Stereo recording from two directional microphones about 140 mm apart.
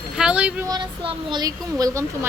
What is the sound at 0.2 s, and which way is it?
Speech, 5° right (ahead or behind).